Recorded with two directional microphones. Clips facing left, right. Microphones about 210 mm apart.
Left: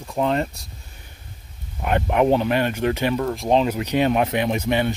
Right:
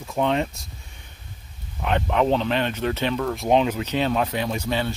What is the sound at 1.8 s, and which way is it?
Speech, 10° left (ahead or behind).